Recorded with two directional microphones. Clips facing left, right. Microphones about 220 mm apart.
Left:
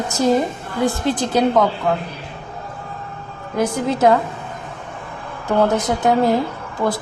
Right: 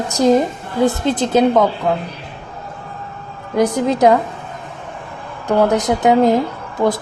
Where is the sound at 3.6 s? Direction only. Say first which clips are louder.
Right 3 dB; 15° right (ahead or behind).